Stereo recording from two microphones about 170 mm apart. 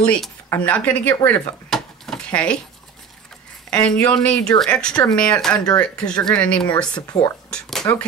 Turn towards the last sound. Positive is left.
turn(degrees=5)  # may be behind; listen again after turning